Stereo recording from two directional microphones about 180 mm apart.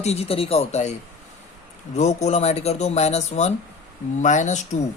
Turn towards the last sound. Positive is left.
turn(degrees=40)  # may be behind; listen again after turning